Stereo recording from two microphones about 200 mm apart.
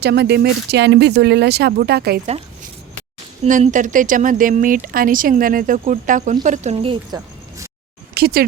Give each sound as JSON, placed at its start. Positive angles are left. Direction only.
{"t": 0.0, "sound": "speech", "side_deg": -55}
{"t": 3.4, "sound": "speech", "side_deg": -35}
{"t": 8.1, "sound": "speech", "side_deg": -50}